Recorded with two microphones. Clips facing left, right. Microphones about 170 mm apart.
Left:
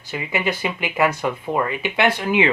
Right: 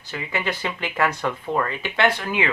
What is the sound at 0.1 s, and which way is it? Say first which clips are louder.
Speech: left 3 dB; 15° left (ahead or behind).